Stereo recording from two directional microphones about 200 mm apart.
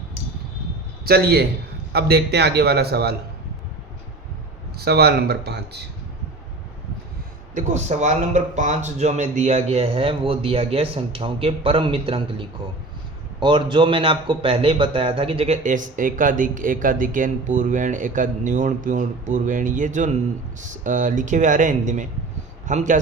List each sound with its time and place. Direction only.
1.0 s a man's voice: 50° right (ahead or behind)
4.9 s speech: 55° right (ahead or behind)
7.5 s speech: 35° right (ahead or behind)